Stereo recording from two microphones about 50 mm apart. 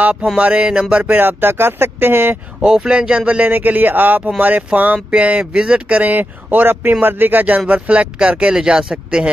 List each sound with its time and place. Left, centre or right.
0.0 s music: right
0.4 s speech: right
1.2 s speech: right
2.6 s speech: centre
3.4 s speech: right
5.1 s speech: right